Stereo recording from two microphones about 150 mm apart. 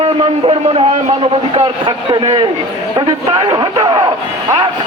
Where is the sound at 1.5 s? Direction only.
30° right (ahead or behind).